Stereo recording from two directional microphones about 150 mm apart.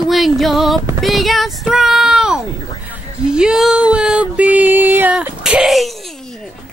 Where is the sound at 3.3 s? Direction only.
5° right (ahead or behind).